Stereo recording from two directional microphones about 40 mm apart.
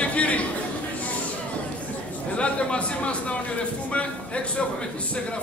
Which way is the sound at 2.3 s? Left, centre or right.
Left.